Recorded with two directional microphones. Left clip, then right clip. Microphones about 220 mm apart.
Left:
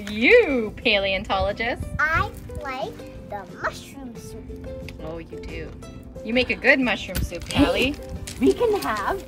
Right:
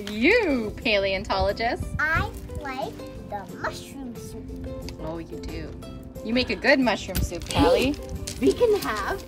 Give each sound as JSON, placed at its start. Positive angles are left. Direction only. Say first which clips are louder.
{"t": 0.0, "sound": "speech", "louder": "left 5 dB", "side_deg": 0}
{"t": 5.0, "sound": "speech", "louder": "right 1 dB", "side_deg": -5}
{"t": 8.5, "sound": "speech", "louder": "even", "side_deg": 25}